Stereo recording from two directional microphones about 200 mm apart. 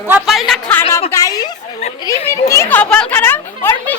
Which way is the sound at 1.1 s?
15° left (ahead or behind).